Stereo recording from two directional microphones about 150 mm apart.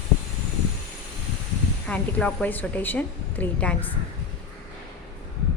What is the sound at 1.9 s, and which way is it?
A woman's voice, 10° left (ahead or behind).